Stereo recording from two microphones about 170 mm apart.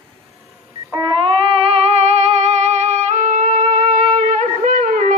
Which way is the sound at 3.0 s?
45° right (ahead or behind).